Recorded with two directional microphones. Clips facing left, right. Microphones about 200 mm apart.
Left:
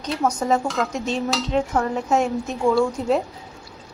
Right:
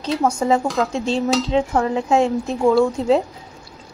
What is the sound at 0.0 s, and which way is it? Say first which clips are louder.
Speech: right 3 dB; 30° right (ahead or behind).